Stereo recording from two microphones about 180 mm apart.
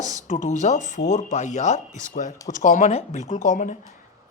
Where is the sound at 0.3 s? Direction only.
45° left (ahead or behind).